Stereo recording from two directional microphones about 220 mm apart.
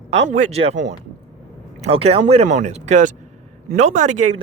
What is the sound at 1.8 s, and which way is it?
Speech, 25° right (ahead or behind).